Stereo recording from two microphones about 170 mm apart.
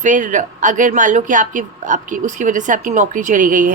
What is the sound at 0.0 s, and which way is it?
Speech, 50° right (ahead or behind).